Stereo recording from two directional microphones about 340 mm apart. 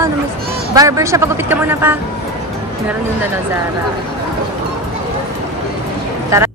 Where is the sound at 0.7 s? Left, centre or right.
Centre.